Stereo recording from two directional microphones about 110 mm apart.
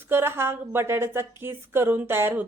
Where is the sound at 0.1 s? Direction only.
20° right (ahead or behind).